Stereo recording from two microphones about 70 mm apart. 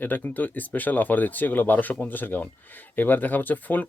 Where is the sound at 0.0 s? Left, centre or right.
Left.